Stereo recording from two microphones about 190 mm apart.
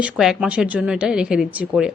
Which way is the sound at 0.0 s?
5° right (ahead or behind).